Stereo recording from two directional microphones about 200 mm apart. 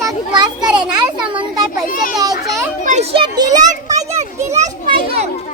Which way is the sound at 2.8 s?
35° right (ahead or behind).